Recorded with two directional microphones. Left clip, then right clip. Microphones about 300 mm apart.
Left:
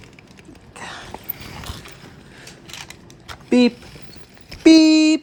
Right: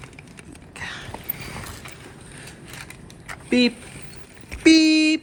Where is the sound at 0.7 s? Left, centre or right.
Centre.